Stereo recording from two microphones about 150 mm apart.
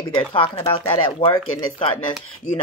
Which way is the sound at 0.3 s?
35° left (ahead or behind).